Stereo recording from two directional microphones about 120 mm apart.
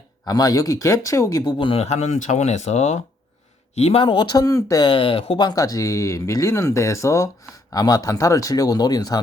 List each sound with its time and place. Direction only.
0.3 s speech: 30° left (ahead or behind)
1.8 s speech: 70° left (ahead or behind)
3.8 s speech: 60° left (ahead or behind); by 4.9 s 30° left (ahead or behind)
4.9 s speech: 45° left (ahead or behind)